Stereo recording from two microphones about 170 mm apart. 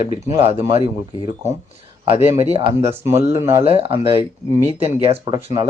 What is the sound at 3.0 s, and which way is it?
Speech, 15° right (ahead or behind).